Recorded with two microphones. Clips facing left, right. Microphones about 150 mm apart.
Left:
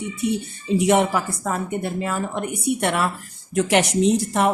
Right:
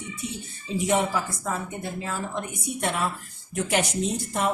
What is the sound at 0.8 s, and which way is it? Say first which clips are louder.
A woman's voice: left 5 dB; 70° left (ahead or behind).